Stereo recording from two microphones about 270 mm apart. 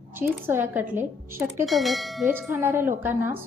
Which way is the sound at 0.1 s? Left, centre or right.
Centre.